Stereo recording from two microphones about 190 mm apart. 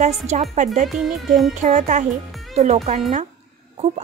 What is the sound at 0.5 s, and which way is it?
Speech, 40° right (ahead or behind).